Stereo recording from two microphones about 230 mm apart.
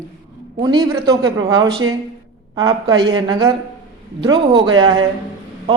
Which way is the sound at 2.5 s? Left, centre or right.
Centre.